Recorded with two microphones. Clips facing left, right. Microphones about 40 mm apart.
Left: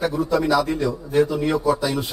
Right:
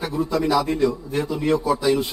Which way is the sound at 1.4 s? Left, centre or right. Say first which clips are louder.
Even; centre.